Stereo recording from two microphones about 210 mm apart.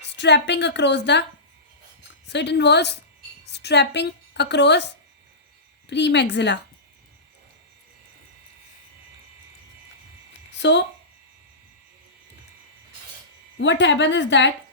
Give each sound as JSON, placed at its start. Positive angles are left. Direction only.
{"t": 0.1, "sound": "a woman's voice", "side_deg": 55}
{"t": 2.2, "sound": "a woman's voice", "side_deg": 55}
{"t": 5.9, "sound": "a woman's voice", "side_deg": 55}
{"t": 13.6, "sound": "a woman's voice", "side_deg": 60}